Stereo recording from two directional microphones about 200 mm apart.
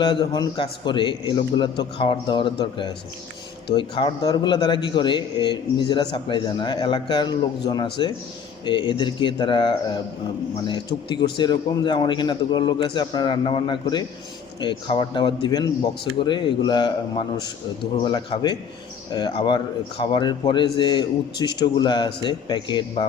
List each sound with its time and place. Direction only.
0.0 s a man's voice: 25° left (ahead or behind)